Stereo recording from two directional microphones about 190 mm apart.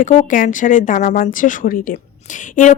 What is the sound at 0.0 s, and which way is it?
A woman's voice, 40° left (ahead or behind).